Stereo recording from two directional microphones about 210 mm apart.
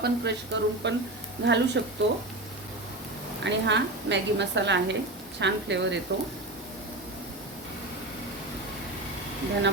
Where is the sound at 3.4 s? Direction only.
55° right (ahead or behind).